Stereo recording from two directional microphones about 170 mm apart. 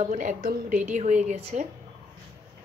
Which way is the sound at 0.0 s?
45° right (ahead or behind).